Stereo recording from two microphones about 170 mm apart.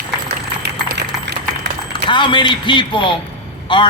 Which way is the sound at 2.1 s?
30° left (ahead or behind).